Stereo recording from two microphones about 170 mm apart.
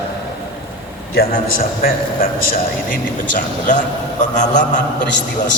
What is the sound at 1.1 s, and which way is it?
A man's voice, 60° left (ahead or behind).